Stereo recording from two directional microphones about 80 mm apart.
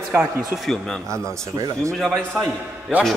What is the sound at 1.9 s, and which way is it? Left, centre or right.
Speech, centre.